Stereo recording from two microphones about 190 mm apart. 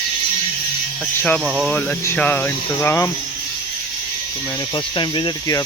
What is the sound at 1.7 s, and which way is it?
Speech, 10° left (ahead or behind).